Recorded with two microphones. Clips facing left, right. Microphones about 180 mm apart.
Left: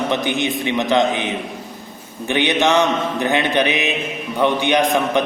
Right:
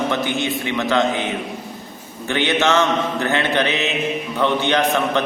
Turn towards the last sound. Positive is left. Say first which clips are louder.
# left 2 dB
turn(degrees=15)  # may be behind; listen again after turning